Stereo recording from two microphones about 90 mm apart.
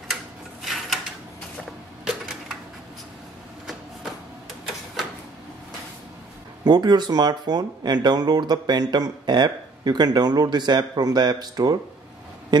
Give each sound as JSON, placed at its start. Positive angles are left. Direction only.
{"t": 0.1, "sound": "rub", "side_deg": 0}
{"t": 2.0, "sound": "a sound", "side_deg": -5}
{"t": 6.6, "sound": "speech", "side_deg": -50}